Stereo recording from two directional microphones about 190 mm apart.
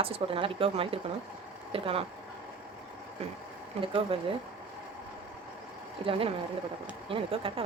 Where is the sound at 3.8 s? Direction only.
30° right (ahead or behind).